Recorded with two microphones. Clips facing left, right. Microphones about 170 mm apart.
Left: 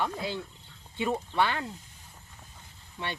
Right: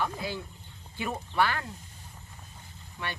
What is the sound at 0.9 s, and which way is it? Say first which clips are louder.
Speech: left 1 dB; 25° left (ahead or behind).